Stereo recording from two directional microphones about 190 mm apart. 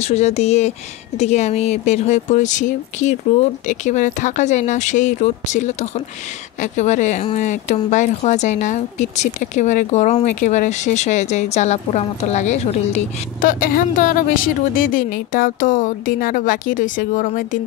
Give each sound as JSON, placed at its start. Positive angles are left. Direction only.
{"t": 0.0, "sound": "speech", "side_deg": 35}